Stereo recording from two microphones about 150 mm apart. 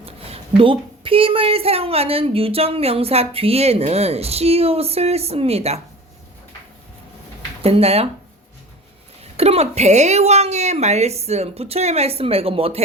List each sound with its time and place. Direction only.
0.0 s a woman's voice: 40° right (ahead or behind)
7.6 s a woman's voice: 40° right (ahead or behind)
9.4 s a woman's voice: 45° right (ahead or behind)